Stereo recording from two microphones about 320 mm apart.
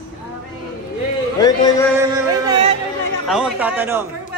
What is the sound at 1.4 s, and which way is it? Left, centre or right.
Speech, centre.